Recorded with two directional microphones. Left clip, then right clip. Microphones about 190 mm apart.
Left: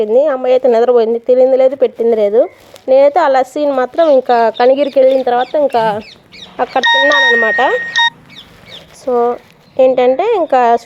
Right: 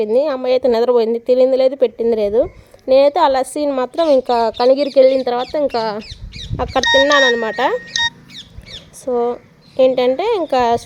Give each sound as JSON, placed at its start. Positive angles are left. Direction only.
{"t": 0.0, "sound": "speech", "side_deg": -15}
{"t": 3.8, "sound": "speech", "side_deg": -5}
{"t": 9.0, "sound": "speech", "side_deg": -5}